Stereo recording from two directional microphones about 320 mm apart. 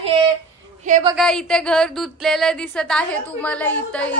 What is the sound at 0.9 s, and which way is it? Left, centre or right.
Speech, centre.